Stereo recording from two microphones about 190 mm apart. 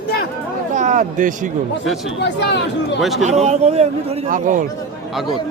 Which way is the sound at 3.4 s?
35° right (ahead or behind).